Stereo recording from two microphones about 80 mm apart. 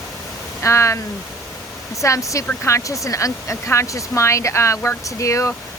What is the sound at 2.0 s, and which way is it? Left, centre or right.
Speech, left.